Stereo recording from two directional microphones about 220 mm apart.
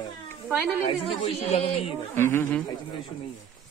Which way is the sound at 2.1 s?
10° left (ahead or behind).